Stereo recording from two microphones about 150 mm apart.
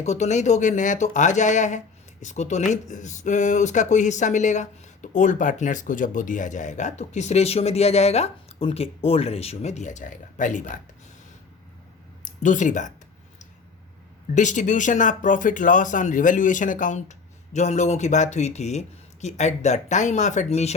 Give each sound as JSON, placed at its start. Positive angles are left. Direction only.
{"t": 0.0, "sound": "speech", "side_deg": 50}
{"t": 12.2, "sound": "speech", "side_deg": 55}
{"t": 14.3, "sound": "speech", "side_deg": 55}